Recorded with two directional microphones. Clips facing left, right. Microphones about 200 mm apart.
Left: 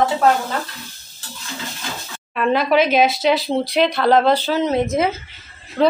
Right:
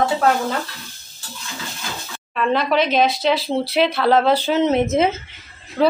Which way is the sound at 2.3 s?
5° left (ahead or behind).